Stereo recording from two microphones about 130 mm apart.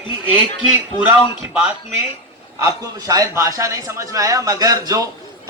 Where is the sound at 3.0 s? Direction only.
25° right (ahead or behind).